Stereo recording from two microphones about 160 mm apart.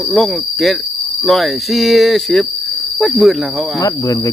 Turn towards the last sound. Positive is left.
turn(degrees=0)  # may be behind; listen again after turning